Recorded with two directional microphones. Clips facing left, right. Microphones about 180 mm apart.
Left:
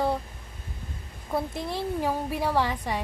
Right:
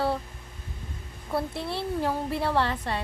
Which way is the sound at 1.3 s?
15° left (ahead or behind).